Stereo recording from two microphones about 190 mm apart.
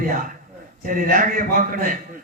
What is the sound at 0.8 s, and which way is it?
A man's voice, 45° right (ahead or behind).